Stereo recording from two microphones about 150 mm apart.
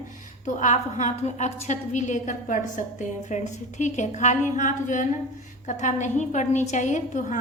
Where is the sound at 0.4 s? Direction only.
55° left (ahead or behind).